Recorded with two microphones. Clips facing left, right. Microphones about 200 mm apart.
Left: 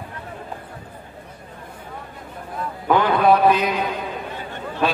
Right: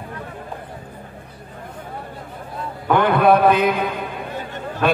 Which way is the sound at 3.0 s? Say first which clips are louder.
Right 2 dB; 55° right (ahead or behind).